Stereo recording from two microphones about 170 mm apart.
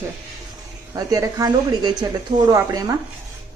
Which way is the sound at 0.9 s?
20° right (ahead or behind).